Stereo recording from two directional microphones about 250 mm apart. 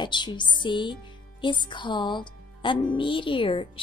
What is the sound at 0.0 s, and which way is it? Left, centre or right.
Speech, centre.